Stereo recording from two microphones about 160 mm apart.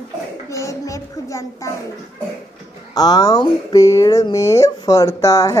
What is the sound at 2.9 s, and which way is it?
Speech, 25° left (ahead or behind).